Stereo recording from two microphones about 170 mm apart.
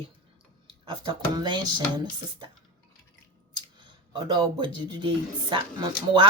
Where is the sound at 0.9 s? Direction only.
25° right (ahead or behind).